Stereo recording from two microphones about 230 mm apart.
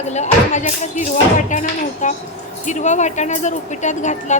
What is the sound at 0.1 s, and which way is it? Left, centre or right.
A woman's voice, left.